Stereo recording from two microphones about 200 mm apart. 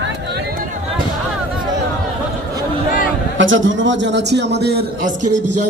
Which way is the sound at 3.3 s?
70° right (ahead or behind).